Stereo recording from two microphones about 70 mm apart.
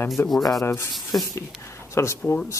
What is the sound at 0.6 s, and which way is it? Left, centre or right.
Speech, left.